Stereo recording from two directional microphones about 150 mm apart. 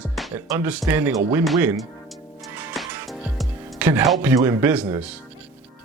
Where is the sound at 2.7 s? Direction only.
Centre (ahead or behind).